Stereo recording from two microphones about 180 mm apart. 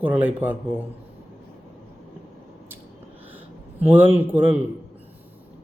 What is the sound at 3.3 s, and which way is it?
A man's voice, 10° right (ahead or behind).